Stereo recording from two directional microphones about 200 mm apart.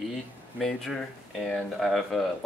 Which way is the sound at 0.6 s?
Centre (ahead or behind).